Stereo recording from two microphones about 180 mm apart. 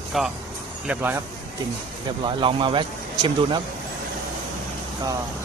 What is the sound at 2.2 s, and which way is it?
Speech, 30° right (ahead or behind).